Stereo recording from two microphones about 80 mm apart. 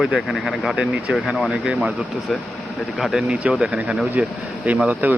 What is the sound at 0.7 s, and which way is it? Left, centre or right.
Speech, centre.